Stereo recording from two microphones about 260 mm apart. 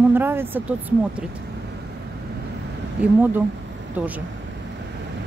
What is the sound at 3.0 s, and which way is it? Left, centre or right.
Speech, centre.